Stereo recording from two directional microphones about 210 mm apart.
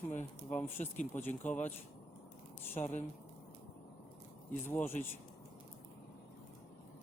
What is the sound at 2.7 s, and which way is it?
Speech, 30° left (ahead or behind).